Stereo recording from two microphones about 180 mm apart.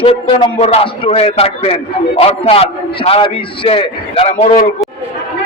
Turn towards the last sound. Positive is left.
turn(degrees=35)  # may be behind; listen again after turning